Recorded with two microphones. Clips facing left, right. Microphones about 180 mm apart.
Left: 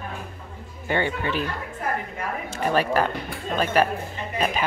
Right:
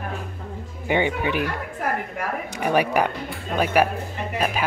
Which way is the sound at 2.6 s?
15° right (ahead or behind).